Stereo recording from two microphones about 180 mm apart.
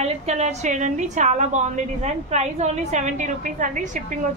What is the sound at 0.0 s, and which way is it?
A woman's voice, 40° right (ahead or behind).